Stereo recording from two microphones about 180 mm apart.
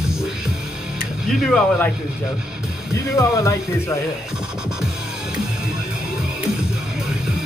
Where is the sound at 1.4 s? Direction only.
5° left (ahead or behind).